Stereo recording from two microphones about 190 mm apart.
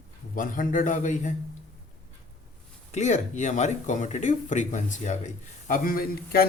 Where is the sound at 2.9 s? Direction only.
40° left (ahead or behind).